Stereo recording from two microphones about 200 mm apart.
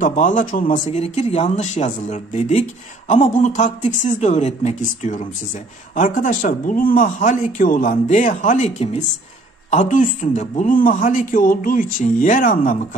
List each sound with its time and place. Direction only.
0.0 s speech: 40° left (ahead or behind)